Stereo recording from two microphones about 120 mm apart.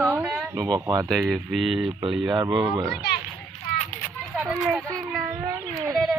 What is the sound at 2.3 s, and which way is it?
Speech, 35° right (ahead or behind).